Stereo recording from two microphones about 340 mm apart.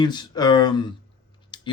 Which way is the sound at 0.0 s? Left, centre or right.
Centre.